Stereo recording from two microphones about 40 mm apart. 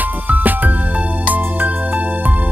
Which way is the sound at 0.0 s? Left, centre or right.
Right.